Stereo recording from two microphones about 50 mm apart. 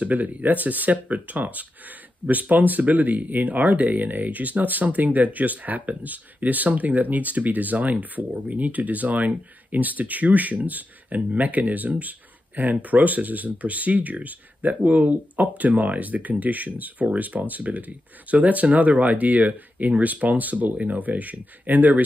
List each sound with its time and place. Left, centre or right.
0.0 s speech: right